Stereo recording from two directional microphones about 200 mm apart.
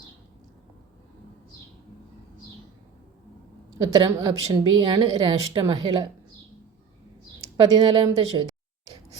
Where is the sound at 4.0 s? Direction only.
20° right (ahead or behind).